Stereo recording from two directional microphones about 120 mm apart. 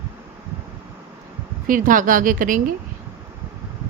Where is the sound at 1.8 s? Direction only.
90° right.